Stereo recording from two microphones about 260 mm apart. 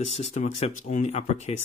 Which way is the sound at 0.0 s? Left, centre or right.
Left.